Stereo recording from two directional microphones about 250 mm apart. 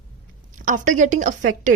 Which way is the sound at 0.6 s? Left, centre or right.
Right.